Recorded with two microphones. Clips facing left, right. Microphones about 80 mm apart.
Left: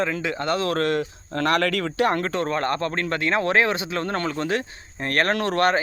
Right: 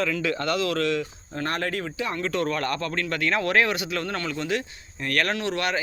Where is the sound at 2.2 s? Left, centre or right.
Left.